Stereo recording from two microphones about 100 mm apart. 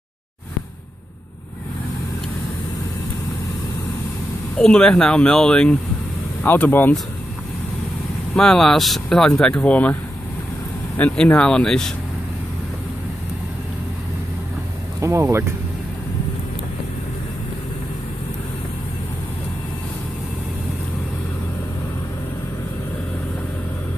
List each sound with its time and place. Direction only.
4.6 s speech: 10° left (ahead or behind)
6.4 s speech: 20° left (ahead or behind)
8.4 s speech: 5° left (ahead or behind)
11.0 s speech: 15° left (ahead or behind)
15.0 s speech: 25° right (ahead or behind)